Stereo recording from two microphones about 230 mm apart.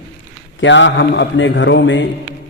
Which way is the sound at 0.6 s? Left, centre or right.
Left.